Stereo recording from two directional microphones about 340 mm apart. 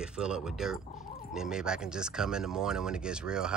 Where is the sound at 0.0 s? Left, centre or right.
Centre.